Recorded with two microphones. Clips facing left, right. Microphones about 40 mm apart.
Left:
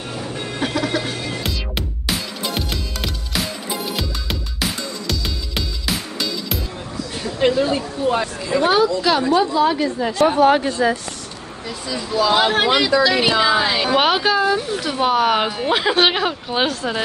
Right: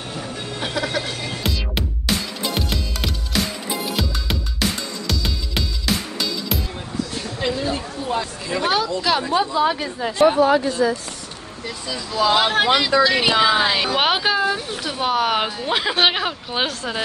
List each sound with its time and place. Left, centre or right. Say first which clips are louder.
0.6 s music: left 3 dB; centre
7.6 s a sound: left 5 dB; left
8.5 s speech: left 5 dB; centre
9.2 s speech: left 3 dB; centre
10.4 s speech: left 2 dB; left
12.4 s a woman's voice: left 1 dB; centre